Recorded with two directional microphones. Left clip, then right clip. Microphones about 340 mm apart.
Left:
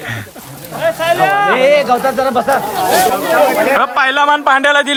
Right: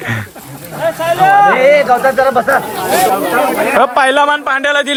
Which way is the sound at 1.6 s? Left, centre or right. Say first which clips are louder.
Right 2 dB; right.